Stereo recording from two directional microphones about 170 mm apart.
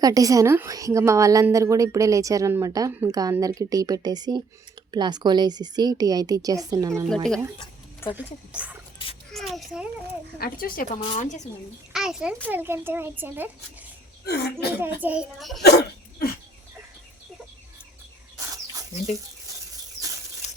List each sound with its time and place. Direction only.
0.0 s a woman's voice: 20° right (ahead or behind)
7.1 s a child's voice: 5° left (ahead or behind)
8.1 s a child's voice: 10° right (ahead or behind)
10.4 s speech: 55° left (ahead or behind)
10.9 s a woman's voice: 35° left (ahead or behind)
11.9 s a child's voice: 5° right (ahead or behind)
14.3 s a child's voice: 70° left (ahead or behind)
14.8 s a child's voice: 10° right (ahead or behind)
15.4 s a child's voice: centre (ahead or behind)
15.6 s speech: 70° left (ahead or behind)
18.5 s bird: 20° right (ahead or behind)